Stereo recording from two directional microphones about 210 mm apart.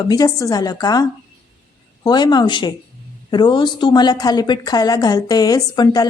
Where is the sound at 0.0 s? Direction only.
20° left (ahead or behind).